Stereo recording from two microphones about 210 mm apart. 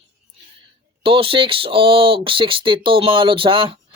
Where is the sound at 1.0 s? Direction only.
25° right (ahead or behind).